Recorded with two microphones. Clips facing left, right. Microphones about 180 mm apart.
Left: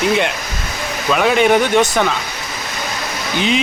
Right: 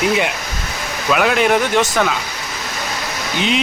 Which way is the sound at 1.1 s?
Centre (ahead or behind).